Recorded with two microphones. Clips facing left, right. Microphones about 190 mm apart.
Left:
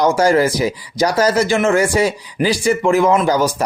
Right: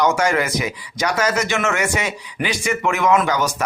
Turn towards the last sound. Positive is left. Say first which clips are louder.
# left 4 dB
turn(degrees=30)  # may be behind; listen again after turning